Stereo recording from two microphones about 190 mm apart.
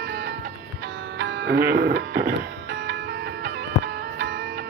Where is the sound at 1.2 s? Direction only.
70° right (ahead or behind).